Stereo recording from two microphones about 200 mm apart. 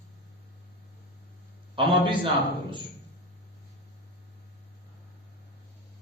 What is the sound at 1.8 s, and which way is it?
Speech, 25° right (ahead or behind).